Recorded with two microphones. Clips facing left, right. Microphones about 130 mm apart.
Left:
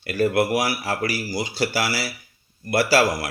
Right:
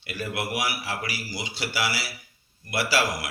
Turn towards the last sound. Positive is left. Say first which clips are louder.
# left 7 dB
turn(degrees=40)  # may be behind; listen again after turning